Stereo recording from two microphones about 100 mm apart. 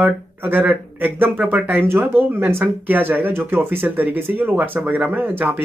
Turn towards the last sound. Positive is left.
turn(degrees=-20)  # may be behind; listen again after turning